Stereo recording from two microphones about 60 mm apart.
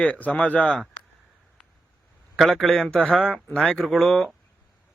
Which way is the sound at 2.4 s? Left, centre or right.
Centre.